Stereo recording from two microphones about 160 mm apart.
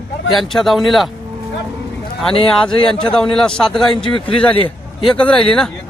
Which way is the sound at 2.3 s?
35° left (ahead or behind).